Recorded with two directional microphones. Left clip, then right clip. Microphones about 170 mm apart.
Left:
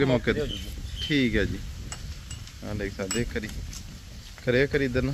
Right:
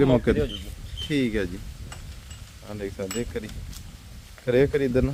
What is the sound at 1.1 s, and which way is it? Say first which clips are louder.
Speech: left 1 dB; 20° right (ahead or behind).